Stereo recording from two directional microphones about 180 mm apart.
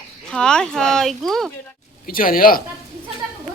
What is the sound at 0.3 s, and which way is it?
Speech, 5° left (ahead or behind).